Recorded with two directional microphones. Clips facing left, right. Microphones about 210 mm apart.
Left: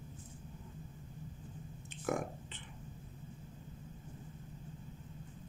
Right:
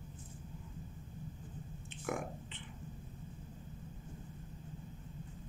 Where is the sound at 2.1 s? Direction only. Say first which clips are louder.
Left 3 dB; 40° left (ahead or behind).